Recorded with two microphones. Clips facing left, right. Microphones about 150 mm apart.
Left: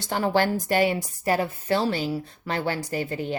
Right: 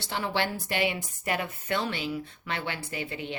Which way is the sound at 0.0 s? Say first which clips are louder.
Left 7 dB; 45° left (ahead or behind).